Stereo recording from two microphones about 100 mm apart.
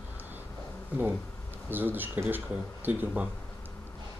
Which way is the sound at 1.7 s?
20° right (ahead or behind).